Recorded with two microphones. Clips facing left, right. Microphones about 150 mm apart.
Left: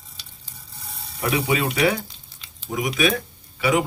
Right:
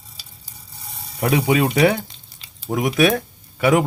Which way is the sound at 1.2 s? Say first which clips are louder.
Right 5 dB; 55° right (ahead or behind).